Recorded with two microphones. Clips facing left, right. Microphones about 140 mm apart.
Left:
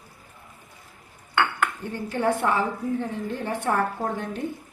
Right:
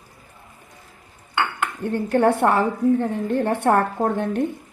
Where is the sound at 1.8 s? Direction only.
60° right (ahead or behind).